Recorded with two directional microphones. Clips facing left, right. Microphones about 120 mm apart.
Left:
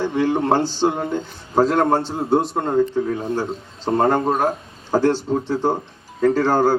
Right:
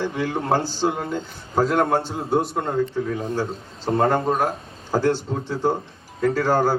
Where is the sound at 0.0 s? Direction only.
25° left (ahead or behind).